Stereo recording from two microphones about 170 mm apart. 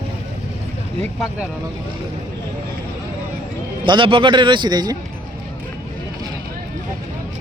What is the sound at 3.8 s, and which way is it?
A man's voice, 30° right (ahead or behind).